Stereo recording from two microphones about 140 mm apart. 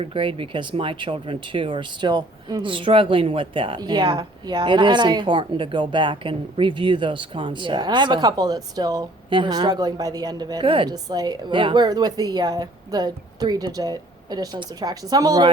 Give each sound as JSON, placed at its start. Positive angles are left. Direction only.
{"t": 0.0, "sound": "speech", "side_deg": -40}